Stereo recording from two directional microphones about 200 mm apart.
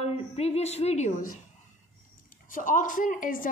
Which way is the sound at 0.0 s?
30° left (ahead or behind).